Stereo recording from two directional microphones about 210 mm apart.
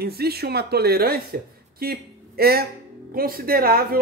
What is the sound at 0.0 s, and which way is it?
Speech, 50° right (ahead or behind).